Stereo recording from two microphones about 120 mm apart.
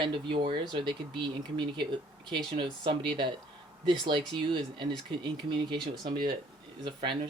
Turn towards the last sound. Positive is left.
turn(degrees=-40)  # may be behind; listen again after turning